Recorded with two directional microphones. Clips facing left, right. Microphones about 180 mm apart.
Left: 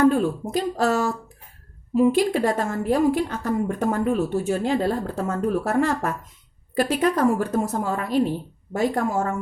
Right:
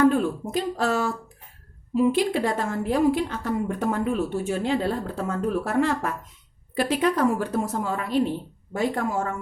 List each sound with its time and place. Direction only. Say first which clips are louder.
0.0 s a woman's voice: left 1 dB; 40° left (ahead or behind)